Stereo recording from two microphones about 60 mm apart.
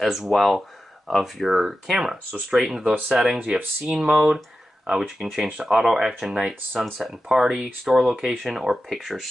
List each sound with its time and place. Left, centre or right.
0.0 s speech: centre
3.3 s speech: right
3.8 s speech: centre